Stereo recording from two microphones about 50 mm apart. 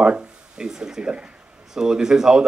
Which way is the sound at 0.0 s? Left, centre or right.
Centre.